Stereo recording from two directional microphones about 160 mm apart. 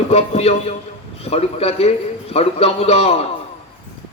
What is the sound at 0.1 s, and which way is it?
A man's voice, 40° left (ahead or behind).